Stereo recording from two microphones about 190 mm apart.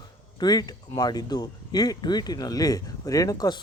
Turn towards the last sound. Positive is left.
turn(degrees=20)  # may be behind; listen again after turning